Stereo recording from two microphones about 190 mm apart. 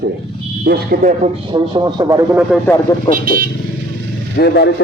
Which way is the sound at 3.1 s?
50° right (ahead or behind).